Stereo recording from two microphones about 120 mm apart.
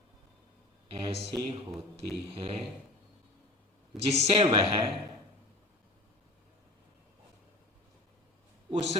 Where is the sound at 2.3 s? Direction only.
50° right (ahead or behind).